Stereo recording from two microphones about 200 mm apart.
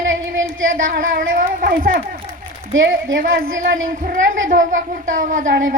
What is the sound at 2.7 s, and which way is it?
Speech, 70° right (ahead or behind).